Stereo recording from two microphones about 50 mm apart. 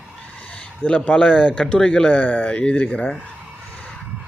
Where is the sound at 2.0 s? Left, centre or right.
Left.